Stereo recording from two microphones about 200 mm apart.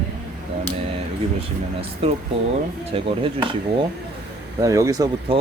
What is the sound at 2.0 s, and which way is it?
Speech, 30° right (ahead or behind).